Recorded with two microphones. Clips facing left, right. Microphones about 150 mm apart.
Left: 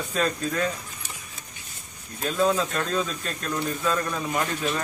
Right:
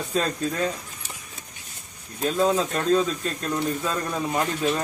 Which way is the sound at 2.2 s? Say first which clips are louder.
Right 1 dB; 25° right (ahead or behind).